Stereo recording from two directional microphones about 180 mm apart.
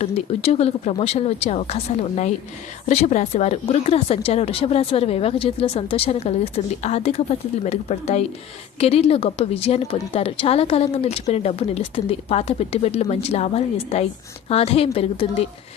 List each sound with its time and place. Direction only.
0.0 s a woman's voice: 35° left (ahead or behind)